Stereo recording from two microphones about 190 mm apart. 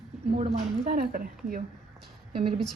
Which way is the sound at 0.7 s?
45° right (ahead or behind).